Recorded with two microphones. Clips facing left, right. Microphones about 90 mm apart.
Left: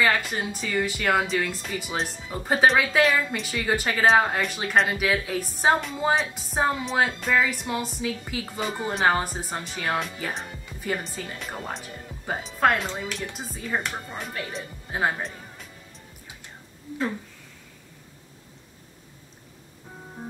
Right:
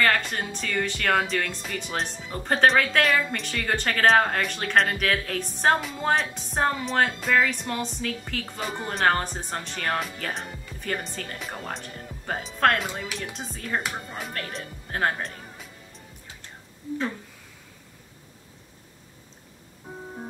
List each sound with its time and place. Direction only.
0.0 s speech: 5° left (ahead or behind)